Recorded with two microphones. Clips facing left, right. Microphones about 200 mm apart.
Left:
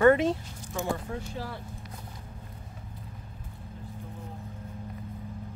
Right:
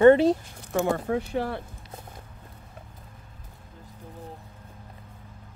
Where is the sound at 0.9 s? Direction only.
65° right (ahead or behind).